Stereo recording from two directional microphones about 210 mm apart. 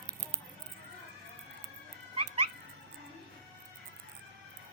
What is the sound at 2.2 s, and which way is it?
Dog, 30° right (ahead or behind).